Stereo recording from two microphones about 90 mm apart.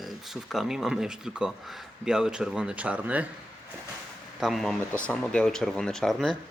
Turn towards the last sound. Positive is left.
turn(degrees=0)  # may be behind; listen again after turning